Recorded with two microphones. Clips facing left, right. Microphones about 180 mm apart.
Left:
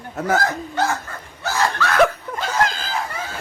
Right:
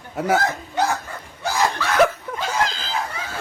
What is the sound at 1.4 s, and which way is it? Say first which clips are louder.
Snicker: even; 15° right (ahead or behind).